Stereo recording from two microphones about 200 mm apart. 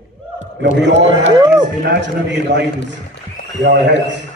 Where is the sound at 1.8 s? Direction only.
60° right (ahead or behind).